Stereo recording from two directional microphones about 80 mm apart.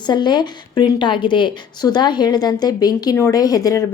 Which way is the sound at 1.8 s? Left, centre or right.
Left.